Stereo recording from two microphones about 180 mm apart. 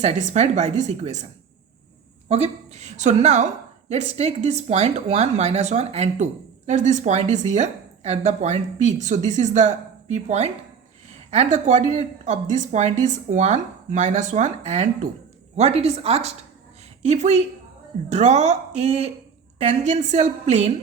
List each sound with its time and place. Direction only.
0.0 s a woman's voice: 40° right (ahead or behind)
2.3 s a woman's voice: 35° right (ahead or behind)